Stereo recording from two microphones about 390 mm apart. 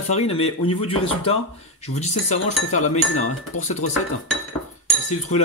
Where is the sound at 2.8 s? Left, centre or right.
Left.